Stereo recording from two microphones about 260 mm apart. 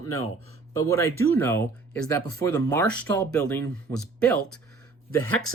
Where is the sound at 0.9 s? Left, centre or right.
Centre.